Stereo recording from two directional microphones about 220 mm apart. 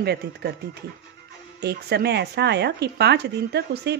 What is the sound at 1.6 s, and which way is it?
Speech, 50° right (ahead or behind).